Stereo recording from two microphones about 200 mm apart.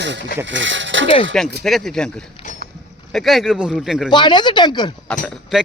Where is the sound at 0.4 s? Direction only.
65° right (ahead or behind).